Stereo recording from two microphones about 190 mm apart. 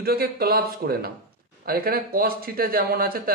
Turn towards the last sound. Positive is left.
turn(degrees=-50)  # may be behind; listen again after turning